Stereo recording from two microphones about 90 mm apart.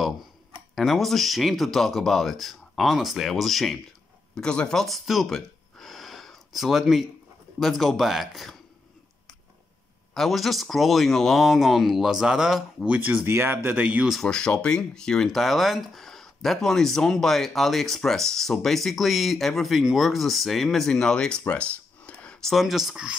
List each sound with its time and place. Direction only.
0.7 s speech: centre (ahead or behind)
10.1 s speech: centre (ahead or behind)
12.9 s speech: 15° right (ahead or behind)
14.2 s speech: 10° left (ahead or behind)